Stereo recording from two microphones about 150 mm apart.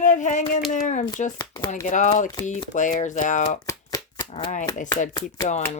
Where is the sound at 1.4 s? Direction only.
30° left (ahead or behind).